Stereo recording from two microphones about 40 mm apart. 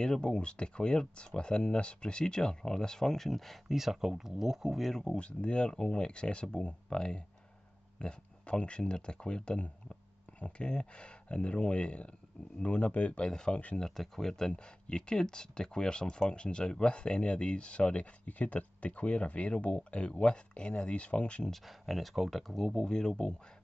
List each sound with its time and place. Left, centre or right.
0.0 s speech: centre
3.6 s speech: centre
4.7 s speech: centre
5.0 s speech: left
13.2 s speech: left
13.7 s speech: centre
14.5 s speech: left
21.6 s speech: centre
22.8 s speech: centre